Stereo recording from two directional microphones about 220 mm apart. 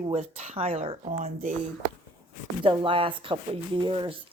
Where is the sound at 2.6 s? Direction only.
25° right (ahead or behind).